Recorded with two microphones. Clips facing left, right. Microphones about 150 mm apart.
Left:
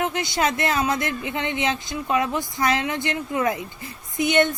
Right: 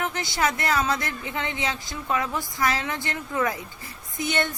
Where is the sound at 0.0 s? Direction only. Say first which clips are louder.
Left 3 dB; 20° left (ahead or behind).